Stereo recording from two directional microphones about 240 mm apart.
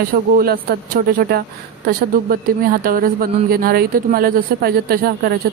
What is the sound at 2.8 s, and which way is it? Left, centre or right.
A woman's voice, right.